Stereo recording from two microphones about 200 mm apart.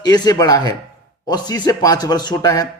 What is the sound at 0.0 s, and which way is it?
A man's voice, 20° left (ahead or behind).